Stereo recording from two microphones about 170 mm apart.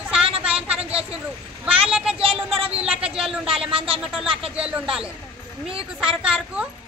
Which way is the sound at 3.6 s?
30° right (ahead or behind).